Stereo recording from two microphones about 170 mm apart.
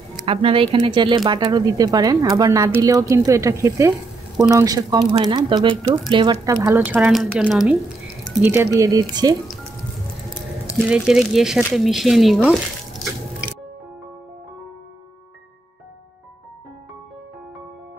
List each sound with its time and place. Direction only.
0.3 s speech: 35° right (ahead or behind); by 8.5 s 10° right (ahead or behind)
8.7 s speech: 20° right (ahead or behind)
10.9 s speech: 5° right (ahead or behind)